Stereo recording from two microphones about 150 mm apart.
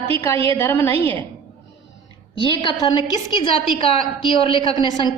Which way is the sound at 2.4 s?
35° left (ahead or behind).